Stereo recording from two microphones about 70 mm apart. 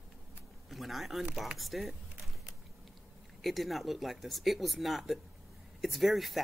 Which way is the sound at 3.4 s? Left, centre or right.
Centre.